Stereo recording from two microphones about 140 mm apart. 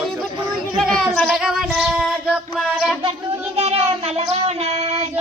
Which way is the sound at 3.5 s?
50° right (ahead or behind).